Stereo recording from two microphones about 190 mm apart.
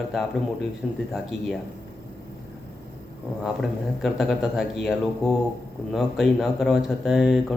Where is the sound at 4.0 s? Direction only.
Centre (ahead or behind).